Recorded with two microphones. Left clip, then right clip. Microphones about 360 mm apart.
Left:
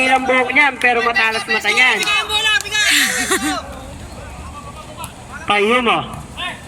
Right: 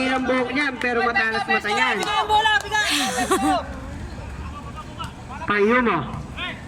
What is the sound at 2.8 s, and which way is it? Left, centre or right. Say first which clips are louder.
Chuckle: left 6 dB; centre.